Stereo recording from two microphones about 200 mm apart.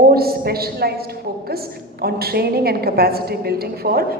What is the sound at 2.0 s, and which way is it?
A woman's voice, 50° right (ahead or behind).